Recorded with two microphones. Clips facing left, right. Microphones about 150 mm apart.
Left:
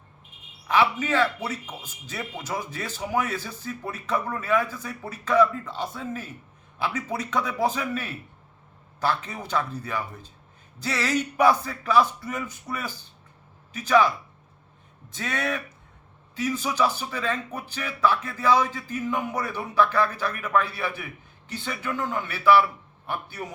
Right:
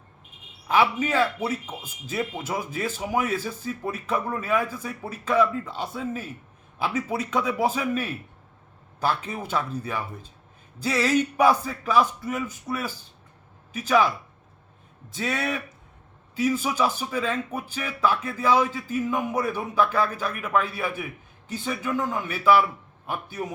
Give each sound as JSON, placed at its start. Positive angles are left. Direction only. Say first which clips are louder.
{"t": 0.7, "sound": "speech", "louder": "right 1 dB", "side_deg": -10}
{"t": 11.4, "sound": "speech", "louder": "even", "side_deg": -10}
{"t": 15.2, "sound": "a man's voice", "louder": "right 1 dB", "side_deg": -5}